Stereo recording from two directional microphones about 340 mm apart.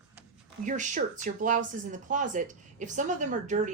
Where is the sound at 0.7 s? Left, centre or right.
Right.